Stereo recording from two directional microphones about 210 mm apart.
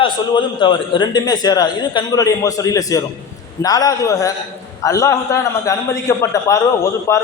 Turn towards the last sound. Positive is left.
turn(degrees=15)  # may be behind; listen again after turning